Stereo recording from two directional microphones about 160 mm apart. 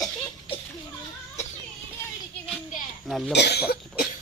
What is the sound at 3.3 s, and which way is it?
Cough, 90° left.